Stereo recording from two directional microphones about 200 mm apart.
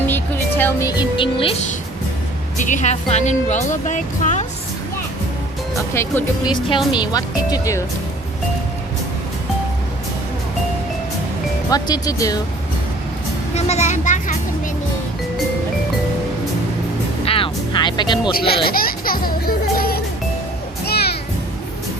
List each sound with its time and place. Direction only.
0.1 s speech: 10° left (ahead or behind); by 1.6 s 25° left (ahead or behind)
2.6 s a woman's voice: 40° left (ahead or behind)
5.9 s speech: 15° left (ahead or behind)
11.7 s speech: 20° left (ahead or behind)
13.5 s vehicle: 35° left (ahead or behind)
17.2 s music: 25° left (ahead or behind)
18.3 s music: 50° left (ahead or behind)